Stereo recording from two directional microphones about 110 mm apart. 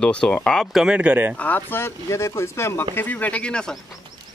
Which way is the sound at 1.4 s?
15° left (ahead or behind).